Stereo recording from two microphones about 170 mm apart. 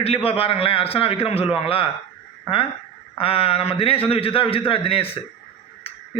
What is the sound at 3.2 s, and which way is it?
A man's voice, 35° left (ahead or behind).